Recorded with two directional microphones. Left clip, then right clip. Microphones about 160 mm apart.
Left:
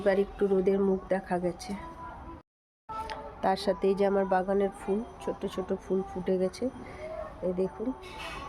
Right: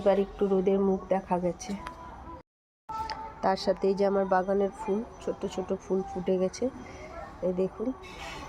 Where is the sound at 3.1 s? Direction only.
5° right (ahead or behind).